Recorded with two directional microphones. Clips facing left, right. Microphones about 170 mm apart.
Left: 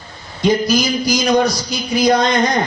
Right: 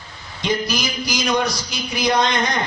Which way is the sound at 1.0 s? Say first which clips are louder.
Left 4 dB; 40° left (ahead or behind).